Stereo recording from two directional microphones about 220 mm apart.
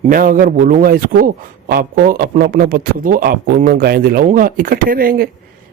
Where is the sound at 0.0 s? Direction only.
40° right (ahead or behind).